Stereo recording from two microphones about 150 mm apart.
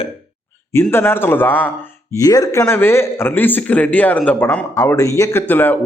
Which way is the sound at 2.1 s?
25° left (ahead or behind).